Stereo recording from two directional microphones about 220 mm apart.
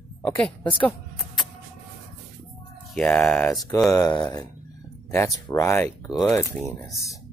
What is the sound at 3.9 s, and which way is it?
Speech, 15° left (ahead or behind).